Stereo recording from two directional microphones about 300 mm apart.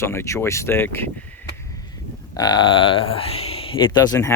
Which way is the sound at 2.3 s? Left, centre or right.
Centre.